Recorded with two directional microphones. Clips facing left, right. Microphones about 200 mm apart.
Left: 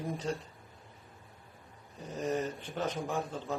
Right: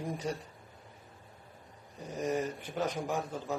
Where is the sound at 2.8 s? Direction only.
10° right (ahead or behind).